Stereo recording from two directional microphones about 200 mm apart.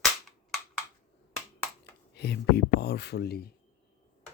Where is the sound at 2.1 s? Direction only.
55° left (ahead or behind).